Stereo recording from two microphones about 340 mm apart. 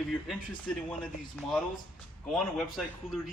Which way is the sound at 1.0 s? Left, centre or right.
Centre.